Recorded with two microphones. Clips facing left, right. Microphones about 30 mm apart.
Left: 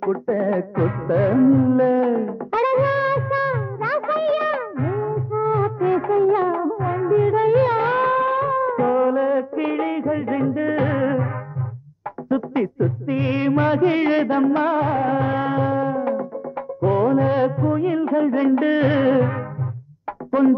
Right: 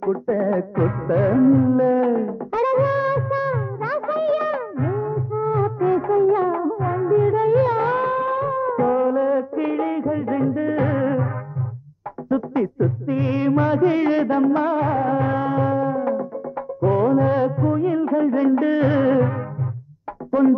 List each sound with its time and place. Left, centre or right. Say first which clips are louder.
0.0 s music: even; left
1.4 s music: even; centre
1.7 s wail: even; left
2.5 s music: left 1 dB; left
6.8 s music of bollywood: even; left
10.5 s music: even; left
12.3 s music: even; left